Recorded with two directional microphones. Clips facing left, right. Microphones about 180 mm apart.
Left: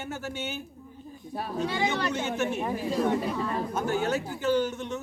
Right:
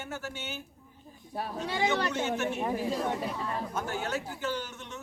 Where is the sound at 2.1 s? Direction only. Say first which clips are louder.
Left 2 dB; 15° left (ahead or behind).